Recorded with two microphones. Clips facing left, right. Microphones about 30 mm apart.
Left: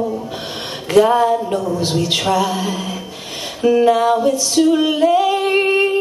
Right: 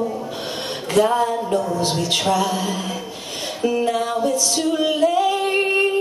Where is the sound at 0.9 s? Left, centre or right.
Centre.